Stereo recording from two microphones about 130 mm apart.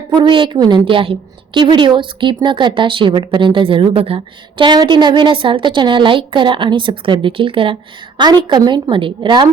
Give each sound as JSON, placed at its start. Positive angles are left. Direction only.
{"t": 0.2, "sound": "speech", "side_deg": -40}